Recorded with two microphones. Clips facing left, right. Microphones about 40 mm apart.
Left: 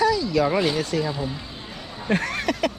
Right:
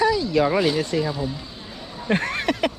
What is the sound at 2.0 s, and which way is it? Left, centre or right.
Speech, right.